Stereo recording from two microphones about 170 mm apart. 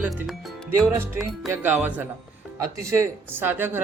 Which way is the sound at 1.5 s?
10° right (ahead or behind).